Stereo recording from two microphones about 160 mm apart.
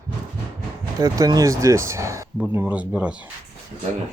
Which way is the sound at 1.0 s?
25° right (ahead or behind).